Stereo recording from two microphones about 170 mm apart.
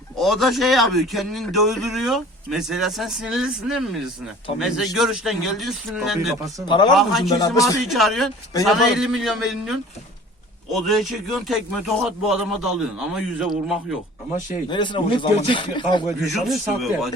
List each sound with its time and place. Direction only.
0.2 s a man's voice: centre (ahead or behind)
6.7 s speech: 25° left (ahead or behind)
6.9 s a man's voice: centre (ahead or behind)
7.3 s speech: 20° left (ahead or behind)
7.9 s a man's voice: centre (ahead or behind)
14.7 s speech: 25° left (ahead or behind)
16.2 s a man's voice: centre (ahead or behind)